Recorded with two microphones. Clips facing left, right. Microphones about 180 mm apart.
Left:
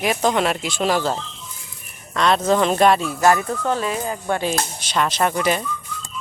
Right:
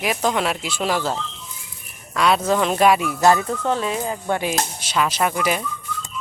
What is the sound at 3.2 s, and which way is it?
Speech, 20° right (ahead or behind).